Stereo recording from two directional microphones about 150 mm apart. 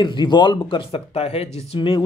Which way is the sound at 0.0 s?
30° left (ahead or behind).